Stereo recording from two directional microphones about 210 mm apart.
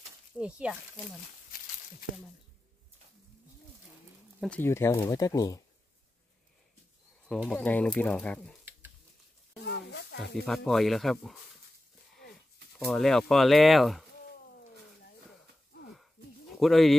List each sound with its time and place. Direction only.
0.4 s speech: 5° right (ahead or behind)
1.5 s a sound: 45° left (ahead or behind)
4.4 s speech: 5° left (ahead or behind)
7.4 s speech: 5° left (ahead or behind)
9.7 s a sound: 50° left (ahead or behind)
10.3 s speech: centre (ahead or behind)
12.7 s speech: centre (ahead or behind)
16.5 s speech: centre (ahead or behind)